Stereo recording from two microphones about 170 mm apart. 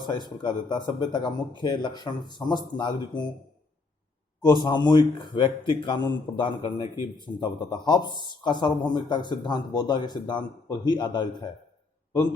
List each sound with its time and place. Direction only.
0.4 s speech: 25° left (ahead or behind)
4.6 s speech: 25° left (ahead or behind)